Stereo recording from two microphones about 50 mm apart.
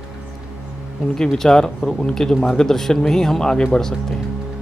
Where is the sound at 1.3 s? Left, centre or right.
Centre.